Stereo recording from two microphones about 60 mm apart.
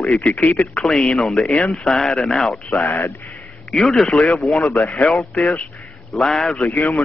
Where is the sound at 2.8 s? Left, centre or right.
Left.